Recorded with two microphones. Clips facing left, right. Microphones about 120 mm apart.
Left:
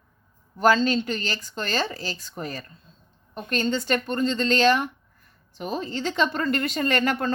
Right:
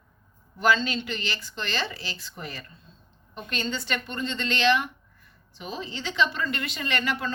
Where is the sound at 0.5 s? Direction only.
40° left (ahead or behind).